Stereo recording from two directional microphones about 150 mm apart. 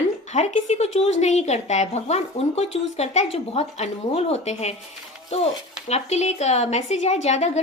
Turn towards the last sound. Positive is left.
turn(degrees=45)  # may be behind; listen again after turning